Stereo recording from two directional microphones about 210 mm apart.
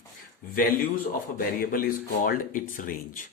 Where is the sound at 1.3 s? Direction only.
45° left (ahead or behind).